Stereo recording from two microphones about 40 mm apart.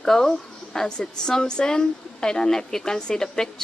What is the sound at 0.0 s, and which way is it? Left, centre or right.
A woman's voice, centre.